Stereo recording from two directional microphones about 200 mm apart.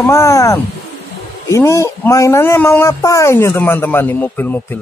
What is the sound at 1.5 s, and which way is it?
A man's voice, 15° left (ahead or behind).